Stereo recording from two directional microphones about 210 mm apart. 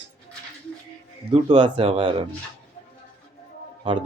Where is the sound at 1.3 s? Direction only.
25° right (ahead or behind).